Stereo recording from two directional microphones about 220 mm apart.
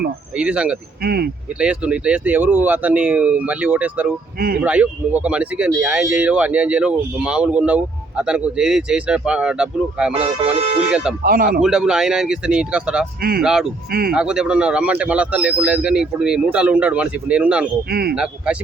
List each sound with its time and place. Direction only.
0.3 s speech: 5° right (ahead or behind)
1.0 s speech: 45° right (ahead or behind)
1.5 s speech: 5° right (ahead or behind)
4.4 s speech: 40° right (ahead or behind)
4.6 s speech: 5° right (ahead or behind)
10.2 s speech: 30° right (ahead or behind)
11.2 s speech: 40° right (ahead or behind)
11.6 s speech: 5° right (ahead or behind)
17.8 s speech: 45° right (ahead or behind)
18.1 s speech: 5° right (ahead or behind)